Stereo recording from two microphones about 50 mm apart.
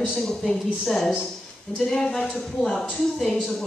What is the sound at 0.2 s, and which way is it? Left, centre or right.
Speech, centre.